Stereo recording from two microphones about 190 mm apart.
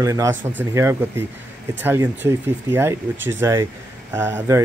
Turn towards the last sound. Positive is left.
turn(degrees=-15)  # may be behind; listen again after turning